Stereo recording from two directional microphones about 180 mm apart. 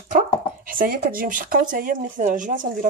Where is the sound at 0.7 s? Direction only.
50° right (ahead or behind).